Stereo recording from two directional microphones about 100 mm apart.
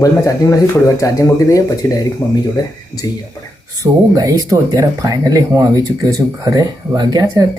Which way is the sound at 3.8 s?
35° right (ahead or behind).